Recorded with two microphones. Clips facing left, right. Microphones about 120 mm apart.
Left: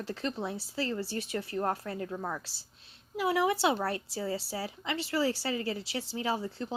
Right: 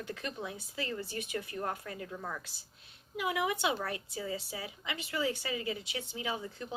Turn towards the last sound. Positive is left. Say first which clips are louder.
# left 5 dB
turn(degrees=35)  # may be behind; listen again after turning